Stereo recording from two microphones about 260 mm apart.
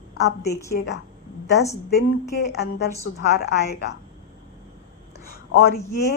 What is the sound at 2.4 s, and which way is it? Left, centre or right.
Speech, left.